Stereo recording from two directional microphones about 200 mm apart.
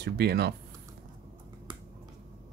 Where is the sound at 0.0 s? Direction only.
55° right (ahead or behind).